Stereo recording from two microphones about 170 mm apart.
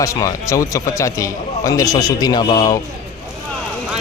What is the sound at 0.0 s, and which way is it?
Speech, 20° left (ahead or behind).